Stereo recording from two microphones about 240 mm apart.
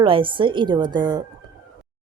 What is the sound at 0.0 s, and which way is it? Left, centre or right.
A woman's voice, right.